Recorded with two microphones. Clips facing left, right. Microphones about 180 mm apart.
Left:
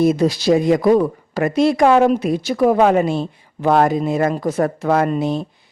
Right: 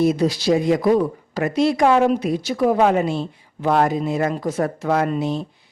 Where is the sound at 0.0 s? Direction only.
50° left (ahead or behind).